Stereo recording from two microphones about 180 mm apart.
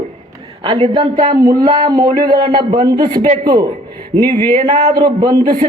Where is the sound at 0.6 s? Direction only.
25° right (ahead or behind).